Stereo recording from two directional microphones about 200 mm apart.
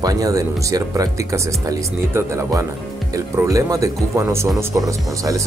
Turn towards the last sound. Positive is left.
turn(degrees=-15)  # may be behind; listen again after turning